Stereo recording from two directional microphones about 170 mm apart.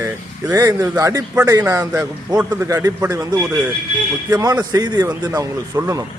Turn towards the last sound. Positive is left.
turn(degrees=-20)  # may be behind; listen again after turning